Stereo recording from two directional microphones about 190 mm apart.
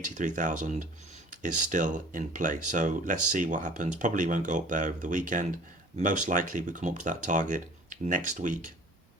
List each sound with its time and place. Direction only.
0.0 s speech: 40° right (ahead or behind)